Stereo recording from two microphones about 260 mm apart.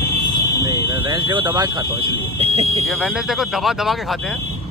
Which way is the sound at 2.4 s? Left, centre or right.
Right.